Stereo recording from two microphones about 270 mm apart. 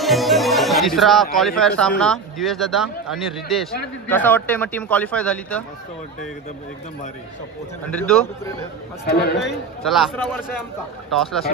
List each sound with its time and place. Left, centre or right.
0.0 s a man's voice: centre
8.0 s a man's voice: centre
9.1 s a man's voice: left
9.4 s a man's voice: centre